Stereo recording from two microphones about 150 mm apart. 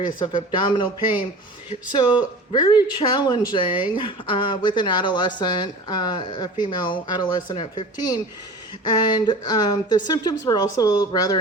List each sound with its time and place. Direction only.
0.2 s speech: 35° left (ahead or behind)
1.9 s speech: 30° left (ahead or behind)